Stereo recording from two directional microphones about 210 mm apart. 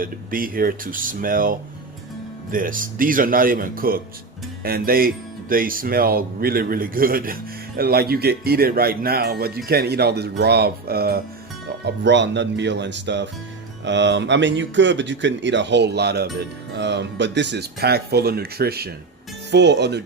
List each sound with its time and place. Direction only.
0.0 s speech: 40° right (ahead or behind)